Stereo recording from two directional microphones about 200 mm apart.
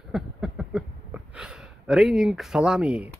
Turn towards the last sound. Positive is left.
turn(degrees=-5)  # may be behind; listen again after turning